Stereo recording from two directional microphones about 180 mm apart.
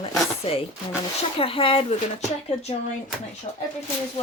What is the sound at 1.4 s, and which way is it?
Speech, 30° left (ahead or behind).